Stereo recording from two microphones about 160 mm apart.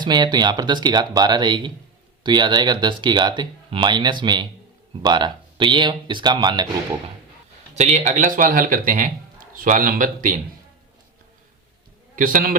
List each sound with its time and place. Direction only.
0.0 s speech: 25° right (ahead or behind)
7.8 s speech: 45° right (ahead or behind)
12.1 s a man's voice: 60° right (ahead or behind)